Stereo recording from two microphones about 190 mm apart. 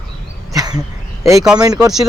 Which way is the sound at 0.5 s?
20° right (ahead or behind).